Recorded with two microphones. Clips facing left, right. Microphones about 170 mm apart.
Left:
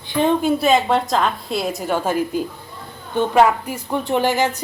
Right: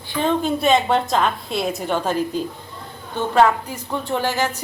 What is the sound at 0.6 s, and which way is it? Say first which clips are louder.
A woman's voice: left 1 dB; centre (ahead or behind).